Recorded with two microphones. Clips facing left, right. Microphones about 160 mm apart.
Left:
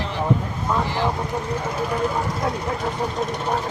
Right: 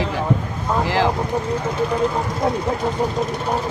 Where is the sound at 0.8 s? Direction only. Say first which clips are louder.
Right 5 dB; 90° right.